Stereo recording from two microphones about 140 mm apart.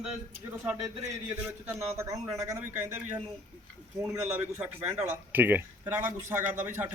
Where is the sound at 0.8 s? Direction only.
20° right (ahead or behind).